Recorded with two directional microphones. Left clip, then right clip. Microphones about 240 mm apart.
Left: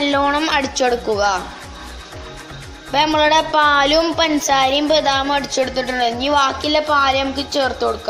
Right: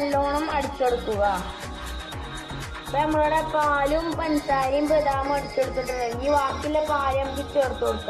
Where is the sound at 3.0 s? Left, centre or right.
Left.